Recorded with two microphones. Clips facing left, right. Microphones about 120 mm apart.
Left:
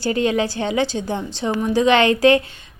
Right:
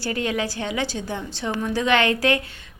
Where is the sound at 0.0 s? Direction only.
25° left (ahead or behind).